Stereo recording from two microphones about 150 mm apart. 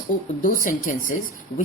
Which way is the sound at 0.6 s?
65° left (ahead or behind).